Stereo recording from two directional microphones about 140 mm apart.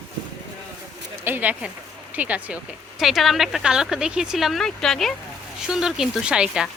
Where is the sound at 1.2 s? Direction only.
15° right (ahead or behind).